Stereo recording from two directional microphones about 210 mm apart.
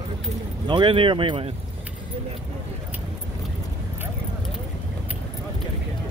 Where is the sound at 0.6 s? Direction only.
25° right (ahead or behind).